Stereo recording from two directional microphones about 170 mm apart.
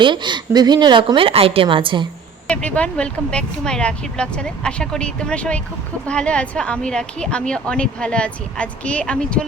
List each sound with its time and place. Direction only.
0.0 s a woman's voice: 25° right (ahead or behind)
2.5 s a woman's voice: 5° left (ahead or behind)